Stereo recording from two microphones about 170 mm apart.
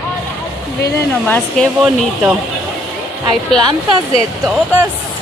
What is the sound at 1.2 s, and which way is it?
Speech, 5° left (ahead or behind).